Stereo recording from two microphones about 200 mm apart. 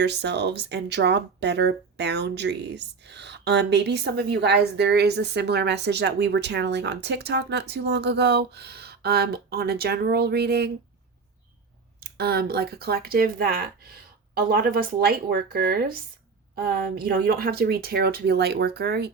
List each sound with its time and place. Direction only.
0.0 s speech: 55° right (ahead or behind)
11.9 s speech: 50° right (ahead or behind)